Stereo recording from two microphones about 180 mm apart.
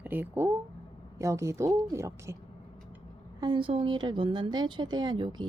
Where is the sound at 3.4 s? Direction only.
30° right (ahead or behind).